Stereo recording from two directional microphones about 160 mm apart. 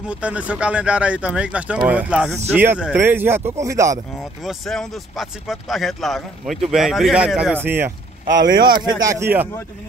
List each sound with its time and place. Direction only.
0.0 s speech: 5° right (ahead or behind)
4.2 s speech: centre (ahead or behind)
8.6 s speech: 25° right (ahead or behind)